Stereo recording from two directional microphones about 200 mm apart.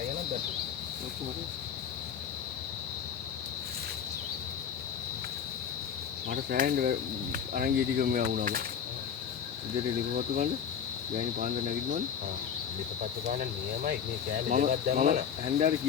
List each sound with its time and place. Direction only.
6.2 s speech: 45° right (ahead or behind)
10.2 s speech: 45° right (ahead or behind)
13.2 s speech: 40° right (ahead or behind)